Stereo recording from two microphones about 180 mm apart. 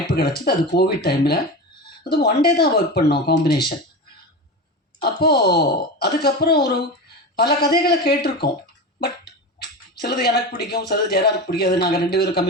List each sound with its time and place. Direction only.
0.1 s speech: 60° left (ahead or behind)
5.0 s speech: 60° left (ahead or behind)
9.6 s speech: 65° left (ahead or behind)